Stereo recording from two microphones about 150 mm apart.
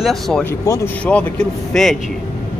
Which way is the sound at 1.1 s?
5° left (ahead or behind).